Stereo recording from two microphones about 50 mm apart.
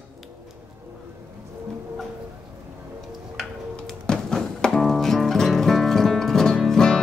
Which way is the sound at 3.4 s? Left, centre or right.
Centre.